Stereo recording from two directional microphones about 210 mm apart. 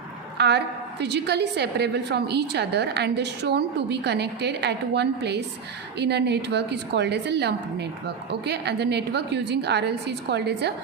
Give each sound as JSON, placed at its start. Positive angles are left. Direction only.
{"t": 0.3, "sound": "a woman's voice", "side_deg": -55}